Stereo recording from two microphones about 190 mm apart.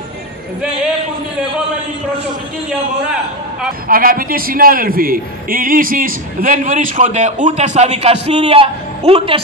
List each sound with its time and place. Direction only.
3.8 s a man's voice: 50° right (ahead or behind); by 9.4 s 30° right (ahead or behind)